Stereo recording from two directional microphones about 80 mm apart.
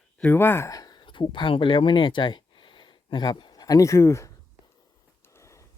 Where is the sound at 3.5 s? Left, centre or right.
Left.